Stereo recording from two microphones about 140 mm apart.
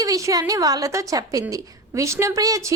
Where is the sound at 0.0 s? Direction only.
25° right (ahead or behind).